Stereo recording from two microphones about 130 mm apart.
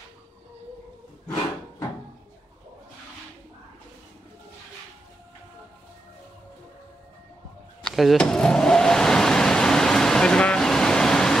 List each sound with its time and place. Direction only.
7.8 s car: centre (ahead or behind)